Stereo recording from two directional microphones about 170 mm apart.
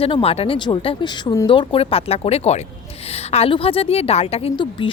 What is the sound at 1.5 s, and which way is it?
A woman's voice, 30° left (ahead or behind).